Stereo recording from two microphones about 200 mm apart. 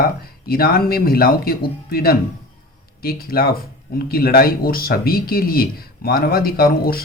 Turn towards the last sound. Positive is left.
turn(degrees=50)  # may be behind; listen again after turning